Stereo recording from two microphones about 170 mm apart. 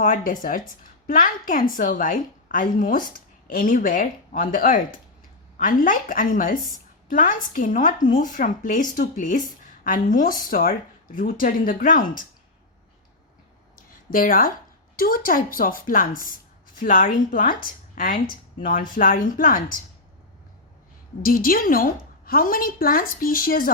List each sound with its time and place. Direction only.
0.3 s a woman's voice: 55° left (ahead or behind)
13.7 s a sound: 55° left (ahead or behind)
14.9 s a woman's voice: 55° left (ahead or behind)
21.2 s a woman's voice: 60° left (ahead or behind)